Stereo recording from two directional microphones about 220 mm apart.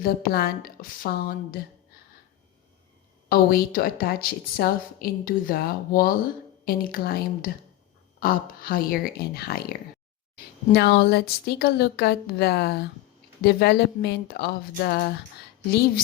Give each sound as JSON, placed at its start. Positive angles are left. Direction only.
{"t": 0.0, "sound": "a woman's voice", "side_deg": 45}
{"t": 3.2, "sound": "a woman's voice", "side_deg": 40}